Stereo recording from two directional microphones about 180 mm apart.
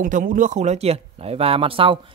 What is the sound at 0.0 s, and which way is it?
Speech, 50° right (ahead or behind).